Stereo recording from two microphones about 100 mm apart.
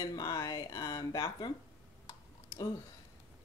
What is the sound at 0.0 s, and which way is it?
Speech, 45° left (ahead or behind).